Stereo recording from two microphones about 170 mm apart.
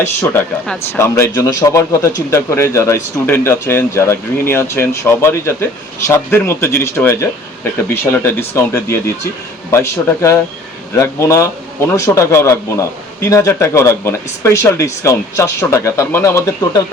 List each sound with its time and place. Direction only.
0.0 s speech: 15° left (ahead or behind)